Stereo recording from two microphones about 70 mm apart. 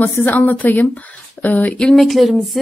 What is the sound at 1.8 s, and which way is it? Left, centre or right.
Speech, centre.